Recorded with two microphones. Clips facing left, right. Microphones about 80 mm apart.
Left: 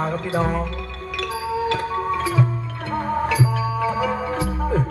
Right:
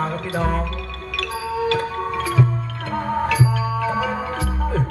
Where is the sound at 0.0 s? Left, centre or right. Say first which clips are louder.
Left 1 dB; left.